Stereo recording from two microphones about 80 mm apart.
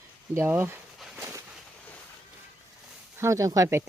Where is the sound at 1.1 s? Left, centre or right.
Right.